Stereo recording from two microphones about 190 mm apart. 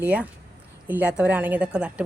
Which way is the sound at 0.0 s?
5° right (ahead or behind).